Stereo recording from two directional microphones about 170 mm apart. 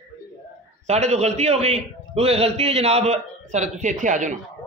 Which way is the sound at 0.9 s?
40° right (ahead or behind).